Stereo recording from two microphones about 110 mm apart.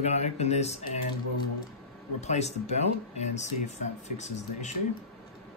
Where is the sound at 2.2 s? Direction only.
90° left.